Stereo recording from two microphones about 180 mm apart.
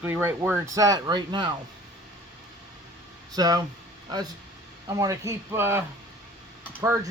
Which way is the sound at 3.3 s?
20° right (ahead or behind).